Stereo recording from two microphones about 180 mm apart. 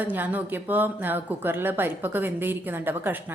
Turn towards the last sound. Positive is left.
turn(degrees=-10)  # may be behind; listen again after turning